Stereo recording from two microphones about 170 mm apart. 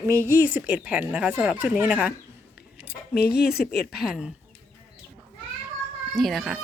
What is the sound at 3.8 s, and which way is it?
Speech, centre (ahead or behind).